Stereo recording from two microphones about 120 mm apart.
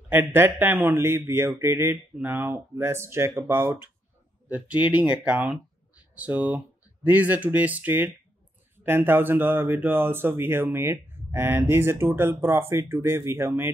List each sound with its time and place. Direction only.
0.1 s speech: 20° right (ahead or behind)